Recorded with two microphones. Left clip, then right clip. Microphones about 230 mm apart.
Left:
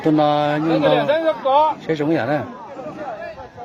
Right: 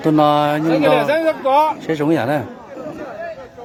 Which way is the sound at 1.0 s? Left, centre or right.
Right.